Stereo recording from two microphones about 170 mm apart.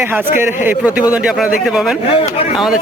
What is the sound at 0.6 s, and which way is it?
A man's voice, 10° right (ahead or behind).